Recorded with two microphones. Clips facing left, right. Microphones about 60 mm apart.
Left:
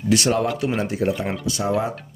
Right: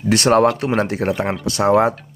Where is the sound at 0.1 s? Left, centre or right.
Right.